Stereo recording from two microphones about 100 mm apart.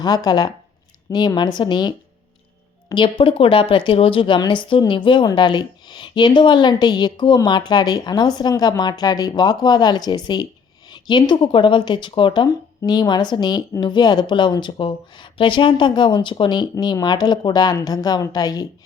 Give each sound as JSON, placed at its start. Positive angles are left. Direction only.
{"t": 0.0, "sound": "a woman's voice", "side_deg": 45}